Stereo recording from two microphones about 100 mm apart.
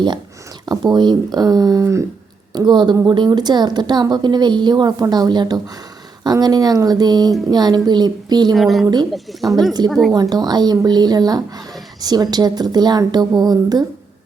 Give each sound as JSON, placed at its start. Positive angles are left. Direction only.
{"t": 0.6, "sound": "speech", "side_deg": -45}
{"t": 2.6, "sound": "a woman's voice", "side_deg": -45}
{"t": 8.5, "sound": "speech", "side_deg": 0}
{"t": 9.4, "sound": "a woman's voice", "side_deg": -45}